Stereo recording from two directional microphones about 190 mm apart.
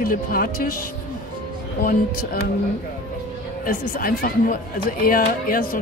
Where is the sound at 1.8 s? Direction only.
50° left (ahead or behind).